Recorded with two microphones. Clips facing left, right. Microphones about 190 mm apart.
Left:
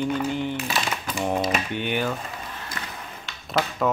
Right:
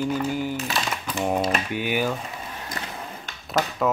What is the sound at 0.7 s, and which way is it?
Typing, 5° left (ahead or behind).